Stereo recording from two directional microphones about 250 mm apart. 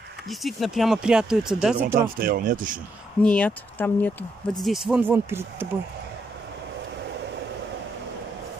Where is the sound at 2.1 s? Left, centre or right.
Right.